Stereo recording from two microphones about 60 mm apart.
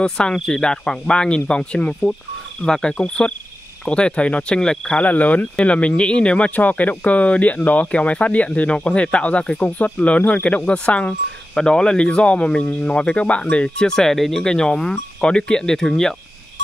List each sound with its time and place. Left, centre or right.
0.0 s speech: centre
5.0 s speech: left; by 16.2 s centre